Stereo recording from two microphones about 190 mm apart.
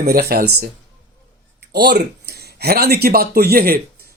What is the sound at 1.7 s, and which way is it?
Speech, 60° right (ahead or behind).